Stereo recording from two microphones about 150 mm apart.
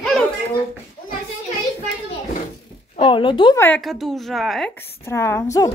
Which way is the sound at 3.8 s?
Centre (ahead or behind).